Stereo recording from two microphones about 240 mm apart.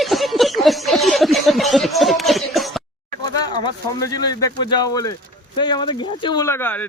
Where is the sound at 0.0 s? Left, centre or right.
Centre.